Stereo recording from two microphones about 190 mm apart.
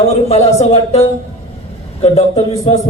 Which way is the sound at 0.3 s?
35° left (ahead or behind).